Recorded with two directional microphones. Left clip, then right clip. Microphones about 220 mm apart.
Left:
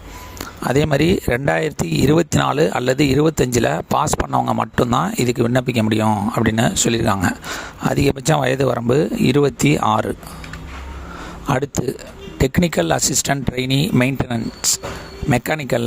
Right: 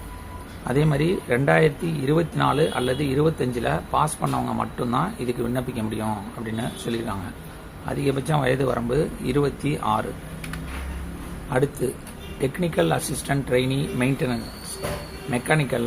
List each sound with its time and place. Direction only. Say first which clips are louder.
0.7 s speech: left 6 dB; 50° left (ahead or behind)
12.4 s speech: left 5 dB; 50° left (ahead or behind)
15.3 s speech: left 4 dB; 55° left (ahead or behind)